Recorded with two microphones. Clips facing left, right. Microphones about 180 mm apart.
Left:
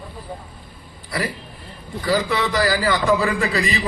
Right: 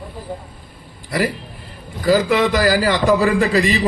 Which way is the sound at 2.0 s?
40° right (ahead or behind).